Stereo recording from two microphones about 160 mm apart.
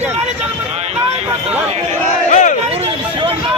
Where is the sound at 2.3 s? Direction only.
50° left (ahead or behind).